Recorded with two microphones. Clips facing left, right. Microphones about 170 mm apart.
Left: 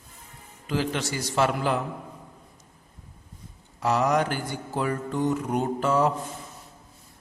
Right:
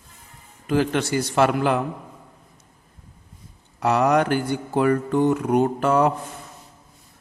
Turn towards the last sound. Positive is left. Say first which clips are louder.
# right 4 dB
turn(degrees=-60)  # may be behind; listen again after turning